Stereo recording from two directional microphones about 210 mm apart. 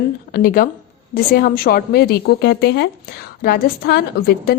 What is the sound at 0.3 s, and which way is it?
A woman's voice, 45° left (ahead or behind).